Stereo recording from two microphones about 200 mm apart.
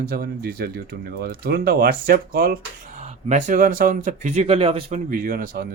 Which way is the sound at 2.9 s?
35° right (ahead or behind).